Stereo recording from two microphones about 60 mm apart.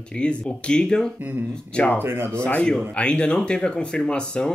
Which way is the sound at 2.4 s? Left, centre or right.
Left.